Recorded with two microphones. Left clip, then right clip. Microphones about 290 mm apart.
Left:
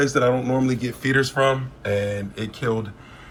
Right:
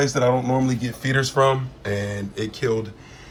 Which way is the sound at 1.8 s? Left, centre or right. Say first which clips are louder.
Left 3 dB; centre.